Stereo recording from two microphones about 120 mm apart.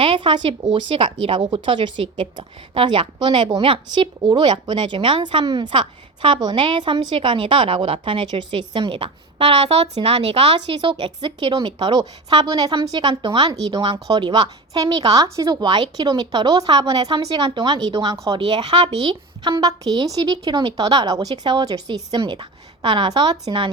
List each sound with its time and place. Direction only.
0.0 s speech: 45° right (ahead or behind)
10.8 s a woman's voice: 45° right (ahead or behind)